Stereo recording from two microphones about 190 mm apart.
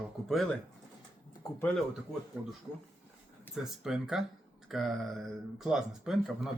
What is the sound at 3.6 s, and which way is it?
Speech, 5° right (ahead or behind).